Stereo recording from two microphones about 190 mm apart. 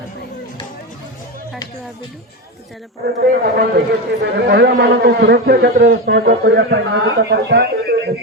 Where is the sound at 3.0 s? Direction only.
55° right (ahead or behind).